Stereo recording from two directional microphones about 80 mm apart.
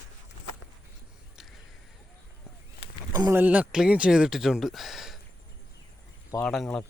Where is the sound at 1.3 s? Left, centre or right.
Centre.